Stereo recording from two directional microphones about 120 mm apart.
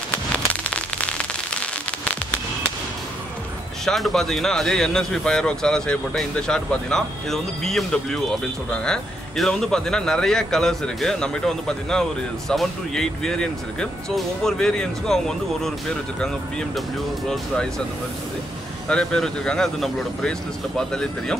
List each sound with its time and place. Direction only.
0.1 s fireworks: 10° left (ahead or behind)
3.8 s speech: centre (ahead or behind)
18.9 s speech: 5° left (ahead or behind)